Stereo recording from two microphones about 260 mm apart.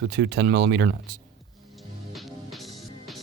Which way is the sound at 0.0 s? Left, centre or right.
Right.